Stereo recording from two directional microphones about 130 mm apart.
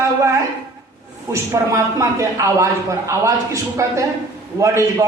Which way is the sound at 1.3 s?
20° right (ahead or behind).